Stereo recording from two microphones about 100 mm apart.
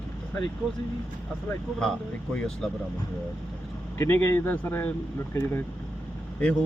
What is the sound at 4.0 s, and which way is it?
Speech, 25° left (ahead or behind).